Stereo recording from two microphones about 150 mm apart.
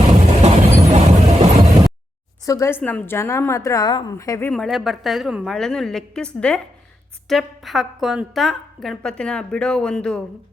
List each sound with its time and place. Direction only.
0.4 s vehicle: 45° right (ahead or behind)
2.4 s a woman's voice: 20° left (ahead or behind)
4.5 s a woman's voice: centre (ahead or behind)